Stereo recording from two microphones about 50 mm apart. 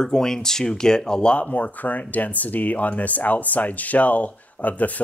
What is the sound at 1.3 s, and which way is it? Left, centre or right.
Speech, left.